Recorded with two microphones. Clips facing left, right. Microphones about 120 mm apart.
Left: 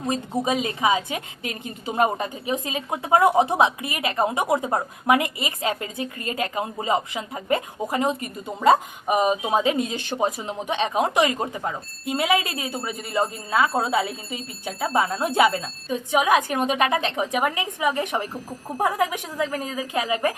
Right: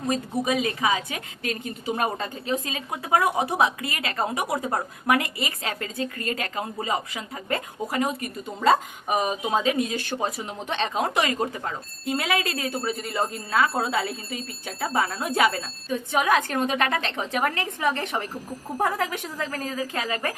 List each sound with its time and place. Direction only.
0.1 s a woman's voice: 25° left (ahead or behind)